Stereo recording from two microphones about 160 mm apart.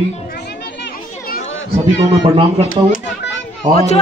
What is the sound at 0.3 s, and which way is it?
Music, 90° left.